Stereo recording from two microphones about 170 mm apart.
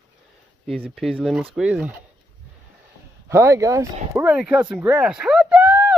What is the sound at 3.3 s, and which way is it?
Speech, 15° right (ahead or behind).